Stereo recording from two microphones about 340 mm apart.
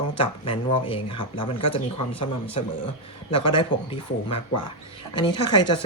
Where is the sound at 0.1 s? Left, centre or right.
Centre.